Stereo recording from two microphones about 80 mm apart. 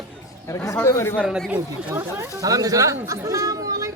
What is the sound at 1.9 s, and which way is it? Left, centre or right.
Speech, right.